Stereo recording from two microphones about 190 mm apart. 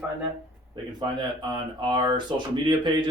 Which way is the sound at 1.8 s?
25° right (ahead or behind).